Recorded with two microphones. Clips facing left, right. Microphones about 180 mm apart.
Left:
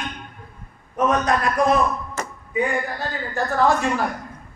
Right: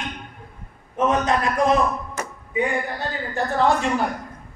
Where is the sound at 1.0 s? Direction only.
25° right (ahead or behind).